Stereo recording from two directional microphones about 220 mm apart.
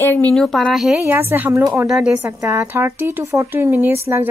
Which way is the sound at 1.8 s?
Centre (ahead or behind).